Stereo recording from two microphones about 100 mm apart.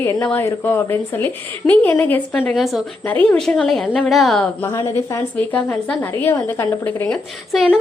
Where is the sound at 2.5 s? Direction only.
Centre (ahead or behind).